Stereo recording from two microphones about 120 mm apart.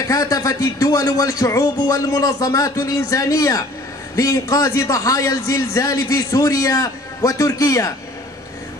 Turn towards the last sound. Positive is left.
turn(degrees=30)  # may be behind; listen again after turning